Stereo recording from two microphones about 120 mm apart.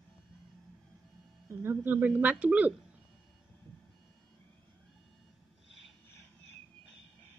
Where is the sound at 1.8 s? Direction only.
15° right (ahead or behind).